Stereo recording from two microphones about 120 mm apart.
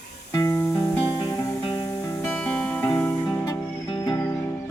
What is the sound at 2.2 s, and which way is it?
Music, 10° left (ahead or behind).